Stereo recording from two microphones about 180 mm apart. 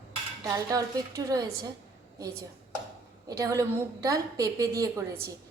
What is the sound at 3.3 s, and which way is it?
A woman's voice, 20° right (ahead or behind).